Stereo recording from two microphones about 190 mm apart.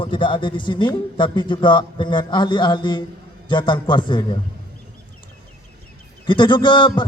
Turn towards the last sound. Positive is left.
turn(degrees=25)  # may be behind; listen again after turning